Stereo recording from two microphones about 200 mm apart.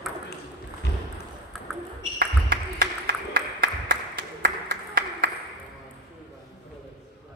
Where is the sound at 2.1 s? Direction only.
50° right (ahead or behind).